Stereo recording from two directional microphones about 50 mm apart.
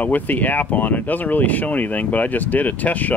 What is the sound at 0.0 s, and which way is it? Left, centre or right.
Speech, left.